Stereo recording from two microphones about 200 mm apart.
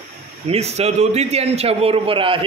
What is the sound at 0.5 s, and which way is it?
A man's voice, 30° right (ahead or behind).